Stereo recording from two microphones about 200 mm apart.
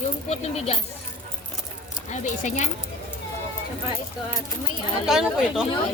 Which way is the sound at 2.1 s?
35° left (ahead or behind).